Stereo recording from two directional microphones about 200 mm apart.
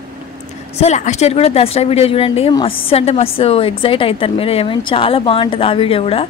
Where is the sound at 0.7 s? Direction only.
35° left (ahead or behind).